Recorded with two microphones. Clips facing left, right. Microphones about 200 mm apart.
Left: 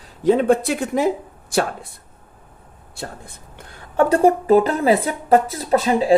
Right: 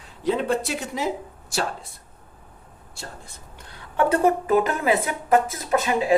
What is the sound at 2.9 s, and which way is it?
Speech, 55° left (ahead or behind).